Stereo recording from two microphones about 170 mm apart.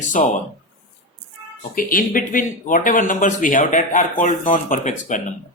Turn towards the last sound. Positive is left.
turn(degrees=50)  # may be behind; listen again after turning